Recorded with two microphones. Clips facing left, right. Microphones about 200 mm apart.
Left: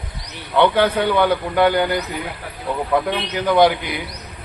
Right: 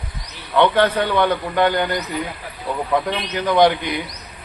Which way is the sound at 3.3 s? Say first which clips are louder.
Even; 10° left (ahead or behind).